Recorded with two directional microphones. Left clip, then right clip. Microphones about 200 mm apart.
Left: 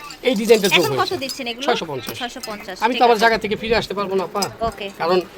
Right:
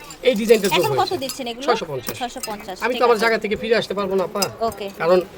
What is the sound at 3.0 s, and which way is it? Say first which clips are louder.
Speech: left 2 dB; 35° left (ahead or behind).